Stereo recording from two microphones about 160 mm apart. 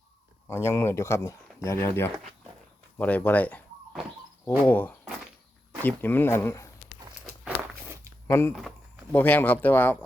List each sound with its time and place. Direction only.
0.4 s speech: 15° left (ahead or behind)
8.3 s speech: 15° left (ahead or behind)